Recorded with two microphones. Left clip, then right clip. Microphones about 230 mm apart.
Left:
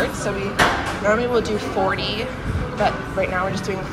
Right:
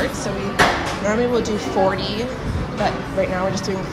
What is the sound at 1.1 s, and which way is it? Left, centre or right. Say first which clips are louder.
Speech: right 1 dB; centre.